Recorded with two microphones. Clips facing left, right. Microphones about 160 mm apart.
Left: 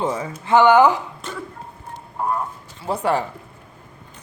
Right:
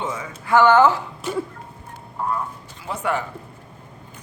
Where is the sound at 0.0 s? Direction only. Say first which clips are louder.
Left 5 dB; 35° left (ahead or behind).